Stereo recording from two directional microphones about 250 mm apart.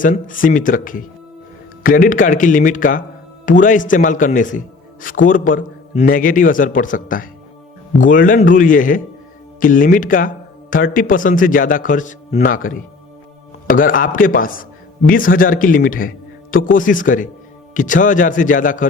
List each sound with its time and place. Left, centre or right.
0.0 s a man's voice: left